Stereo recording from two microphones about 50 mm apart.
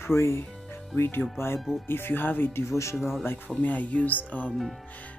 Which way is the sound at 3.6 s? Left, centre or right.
Left.